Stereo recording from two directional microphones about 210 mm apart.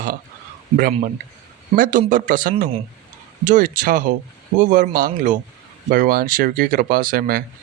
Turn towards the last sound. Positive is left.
turn(degrees=-45)  # may be behind; listen again after turning